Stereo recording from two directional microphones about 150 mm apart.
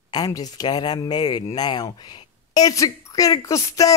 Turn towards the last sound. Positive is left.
turn(degrees=20)  # may be behind; listen again after turning